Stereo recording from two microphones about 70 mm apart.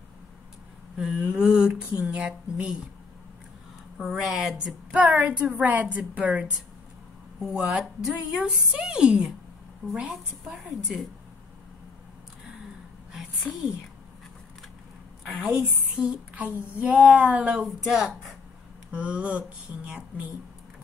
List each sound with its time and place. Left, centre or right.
0.9 s speech: centre
4.0 s a woman's voice: centre
4.6 s a sound: centre
7.3 s a woman's voice: centre
10.5 s a woman's voice: centre
15.2 s a woman's voice: centre
15.6 s a sound: centre
17.8 s a woman's voice: centre
18.9 s a sound: centre